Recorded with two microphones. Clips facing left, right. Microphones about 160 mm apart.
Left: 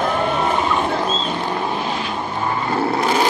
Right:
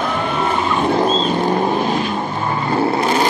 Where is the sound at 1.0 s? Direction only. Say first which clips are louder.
Right 6 dB; 40° right (ahead or behind).